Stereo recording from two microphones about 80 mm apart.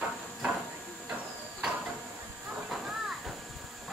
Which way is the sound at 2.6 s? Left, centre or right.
Centre.